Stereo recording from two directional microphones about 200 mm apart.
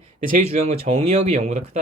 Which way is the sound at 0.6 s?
30° right (ahead or behind).